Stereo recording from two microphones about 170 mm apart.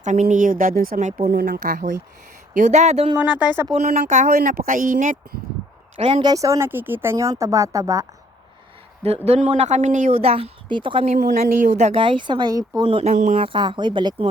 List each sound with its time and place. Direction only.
0.0 s a woman's voice: 45° right (ahead or behind)
1.3 s speech: 65° right (ahead or behind)
2.5 s a woman's voice: 45° right (ahead or behind)
3.2 s speech: 10° right (ahead or behind)
3.7 s a woman's voice: 40° right (ahead or behind)
4.0 s a woman's voice: 55° right (ahead or behind)
6.0 s a woman's voice: 35° right (ahead or behind)
6.3 s speech: 20° right (ahead or behind)
9.0 s a woman's voice: 40° right (ahead or behind)
10.1 s a woman's voice: 35° right (ahead or behind)
11.3 s a woman's voice: 45° right (ahead or behind)
11.9 s speech: 30° right (ahead or behind)
13.1 s a woman's voice: 50° right (ahead or behind)
13.4 s speech: 30° right (ahead or behind)